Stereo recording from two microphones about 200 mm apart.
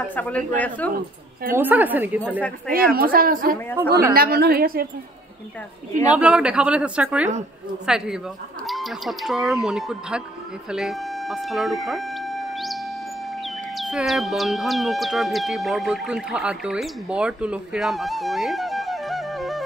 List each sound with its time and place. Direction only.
0.1 s speech: 10° left (ahead or behind)
1.5 s a woman's voice: 10° right (ahead or behind)
2.7 s a woman's voice: 45° right (ahead or behind)
6.0 s speech: 5° right (ahead or behind)